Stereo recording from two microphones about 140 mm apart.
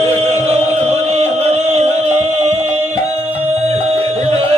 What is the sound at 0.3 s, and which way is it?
Music, 50° right (ahead or behind).